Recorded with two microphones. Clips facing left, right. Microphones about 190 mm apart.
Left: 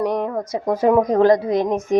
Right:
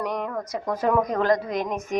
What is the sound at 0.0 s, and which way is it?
A woman's voice, 30° left (ahead or behind).